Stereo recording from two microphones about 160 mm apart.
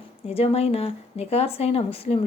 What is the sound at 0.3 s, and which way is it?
Speech, 40° left (ahead or behind).